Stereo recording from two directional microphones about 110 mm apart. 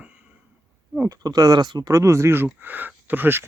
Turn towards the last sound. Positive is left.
turn(degrees=-20)  # may be behind; listen again after turning